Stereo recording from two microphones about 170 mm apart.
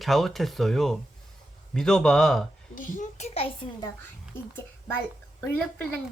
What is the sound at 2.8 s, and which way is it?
Speech, 50° left (ahead or behind).